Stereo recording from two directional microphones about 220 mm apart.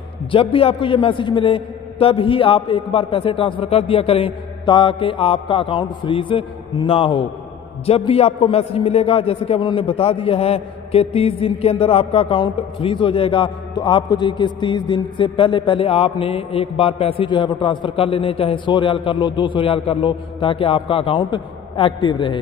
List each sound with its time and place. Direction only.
0.3 s a man's voice: 25° left (ahead or behind)